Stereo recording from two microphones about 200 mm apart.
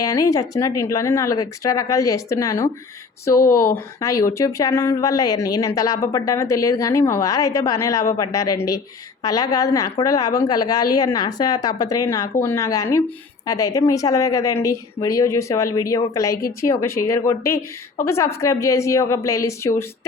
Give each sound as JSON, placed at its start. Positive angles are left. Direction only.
{"t": 0.0, "sound": "speech", "side_deg": 15}
{"t": 3.7, "sound": "a woman's voice", "side_deg": 15}